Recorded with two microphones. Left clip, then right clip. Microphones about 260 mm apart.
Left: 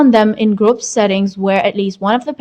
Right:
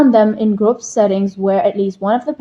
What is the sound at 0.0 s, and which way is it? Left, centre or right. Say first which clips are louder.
A woman's voice: even; left.